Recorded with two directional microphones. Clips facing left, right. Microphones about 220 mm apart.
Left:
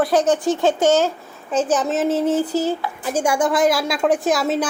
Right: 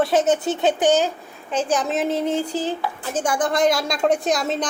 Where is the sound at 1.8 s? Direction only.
Centre (ahead or behind).